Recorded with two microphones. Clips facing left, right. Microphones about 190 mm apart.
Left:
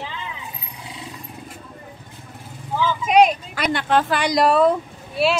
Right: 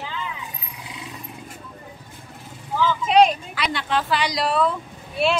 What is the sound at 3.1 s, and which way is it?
Vehicle, 15° left (ahead or behind).